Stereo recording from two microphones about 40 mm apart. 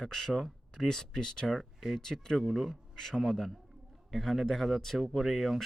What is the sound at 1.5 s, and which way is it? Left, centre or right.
Speech, centre.